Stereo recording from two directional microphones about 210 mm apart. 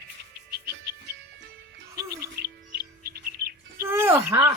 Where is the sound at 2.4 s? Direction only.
50° right (ahead or behind).